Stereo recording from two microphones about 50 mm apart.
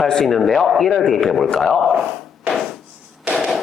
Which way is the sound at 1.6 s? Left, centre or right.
Centre.